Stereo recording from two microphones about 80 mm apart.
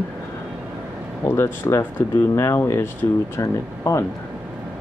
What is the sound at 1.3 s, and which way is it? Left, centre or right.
Speech, left.